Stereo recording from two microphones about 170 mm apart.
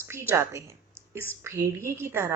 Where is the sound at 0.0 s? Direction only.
15° right (ahead or behind).